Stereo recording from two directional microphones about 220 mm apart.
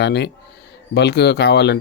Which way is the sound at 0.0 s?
50° left (ahead or behind).